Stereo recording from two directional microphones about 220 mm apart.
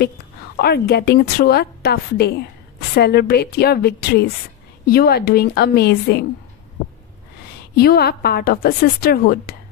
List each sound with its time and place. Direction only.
0.6 s a woman's voice: 45° left (ahead or behind)
7.7 s a woman's voice: 45° left (ahead or behind)